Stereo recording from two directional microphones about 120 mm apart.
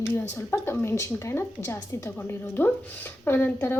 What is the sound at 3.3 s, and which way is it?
Speech, 20° left (ahead or behind).